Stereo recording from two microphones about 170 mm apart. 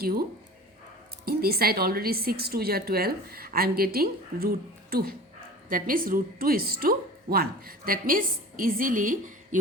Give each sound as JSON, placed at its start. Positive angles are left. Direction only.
{"t": 0.0, "sound": "a woman's voice", "side_deg": -60}